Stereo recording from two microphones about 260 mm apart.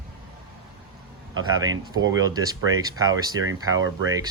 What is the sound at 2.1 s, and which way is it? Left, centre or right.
Speech, centre.